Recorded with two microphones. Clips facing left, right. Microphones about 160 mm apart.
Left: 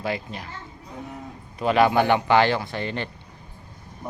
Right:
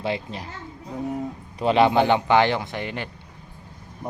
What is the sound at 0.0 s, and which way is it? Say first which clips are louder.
Speech: right 1 dB; 30° right (ahead or behind).